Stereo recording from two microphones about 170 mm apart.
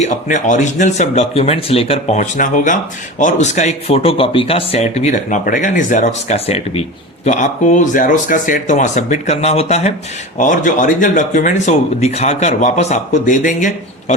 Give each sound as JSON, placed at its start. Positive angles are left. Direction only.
{"t": 0.0, "sound": "speech", "side_deg": 45}